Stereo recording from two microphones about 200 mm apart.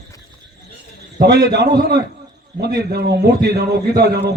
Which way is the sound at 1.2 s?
55° right (ahead or behind).